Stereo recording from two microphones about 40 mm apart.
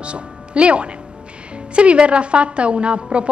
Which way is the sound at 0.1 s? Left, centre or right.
Right.